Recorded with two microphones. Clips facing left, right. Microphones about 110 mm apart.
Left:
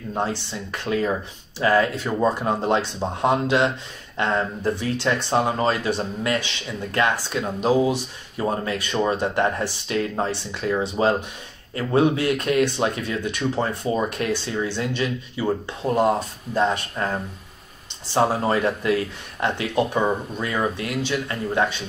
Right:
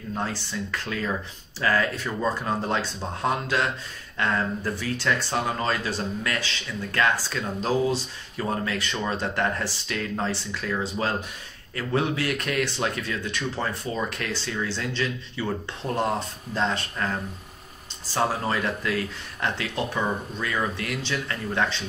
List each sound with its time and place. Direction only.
0.1 s speech: 20° left (ahead or behind)
16.5 s speech: 15° left (ahead or behind)